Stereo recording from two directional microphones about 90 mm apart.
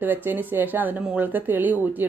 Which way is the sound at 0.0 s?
20° right (ahead or behind).